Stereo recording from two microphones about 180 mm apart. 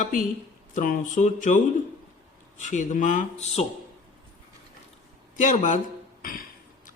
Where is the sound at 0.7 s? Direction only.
45° left (ahead or behind).